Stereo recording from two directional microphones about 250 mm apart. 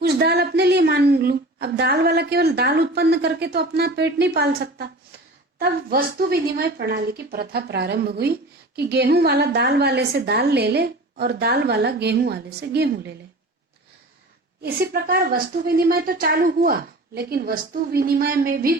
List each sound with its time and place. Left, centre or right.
0.0 s a woman's voice: right
14.6 s a woman's voice: right